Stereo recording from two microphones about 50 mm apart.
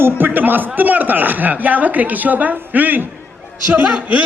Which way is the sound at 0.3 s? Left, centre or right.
Right.